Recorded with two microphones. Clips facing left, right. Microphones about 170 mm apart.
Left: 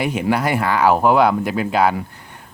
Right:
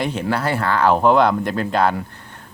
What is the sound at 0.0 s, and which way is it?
Speech, 10° left (ahead or behind).